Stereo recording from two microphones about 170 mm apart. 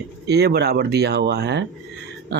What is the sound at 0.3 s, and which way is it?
Speech, 75° right (ahead or behind).